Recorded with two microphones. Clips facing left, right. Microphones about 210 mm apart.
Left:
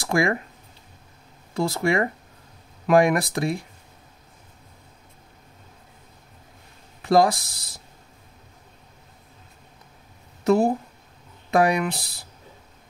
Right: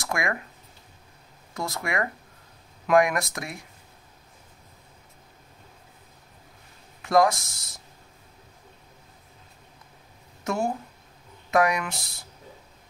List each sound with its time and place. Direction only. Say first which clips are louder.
0.0 s speech: left 7 dB; 30° left (ahead or behind)
1.5 s speech: left 8 dB; 30° left (ahead or behind)
7.0 s speech: left 2 dB; 35° left (ahead or behind)
10.4 s speech: left 8 dB; 35° left (ahead or behind)